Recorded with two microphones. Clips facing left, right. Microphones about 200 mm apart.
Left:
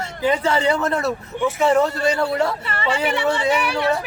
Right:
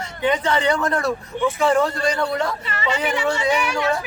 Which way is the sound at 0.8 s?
5° left (ahead or behind).